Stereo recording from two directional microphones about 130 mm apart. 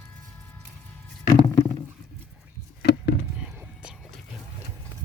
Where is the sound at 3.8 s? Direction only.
5° right (ahead or behind).